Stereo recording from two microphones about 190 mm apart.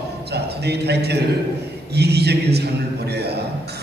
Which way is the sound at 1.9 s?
60° right (ahead or behind).